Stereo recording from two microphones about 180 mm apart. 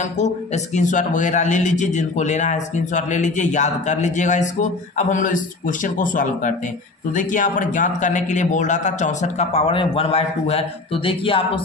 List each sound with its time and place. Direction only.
0.7 s a man's voice: 45° left (ahead or behind)